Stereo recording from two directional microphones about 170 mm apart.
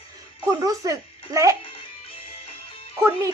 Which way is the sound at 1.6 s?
30° left (ahead or behind).